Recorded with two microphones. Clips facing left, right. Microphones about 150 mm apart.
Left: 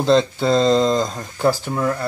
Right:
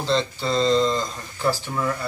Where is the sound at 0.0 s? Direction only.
45° left (ahead or behind).